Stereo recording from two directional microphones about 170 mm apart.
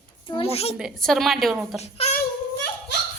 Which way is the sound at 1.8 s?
40° left (ahead or behind).